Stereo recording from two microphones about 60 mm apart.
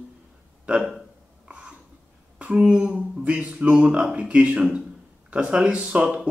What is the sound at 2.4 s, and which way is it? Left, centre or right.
A man's voice, centre.